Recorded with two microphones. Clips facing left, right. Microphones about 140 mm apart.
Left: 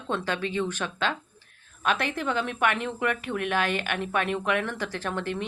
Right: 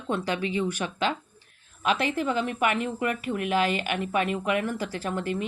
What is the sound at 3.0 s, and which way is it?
A woman's voice, 65° left (ahead or behind).